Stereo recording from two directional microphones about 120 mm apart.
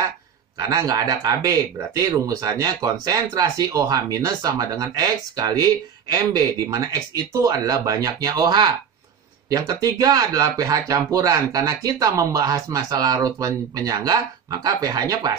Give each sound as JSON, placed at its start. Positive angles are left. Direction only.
{"t": 0.6, "sound": "speech", "side_deg": -30}